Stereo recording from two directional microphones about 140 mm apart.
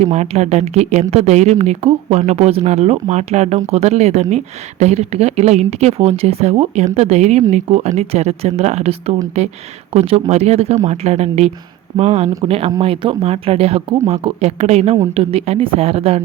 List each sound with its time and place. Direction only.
0.0 s speech: 50° right (ahead or behind)